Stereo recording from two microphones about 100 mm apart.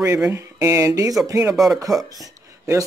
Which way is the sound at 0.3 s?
30° right (ahead or behind).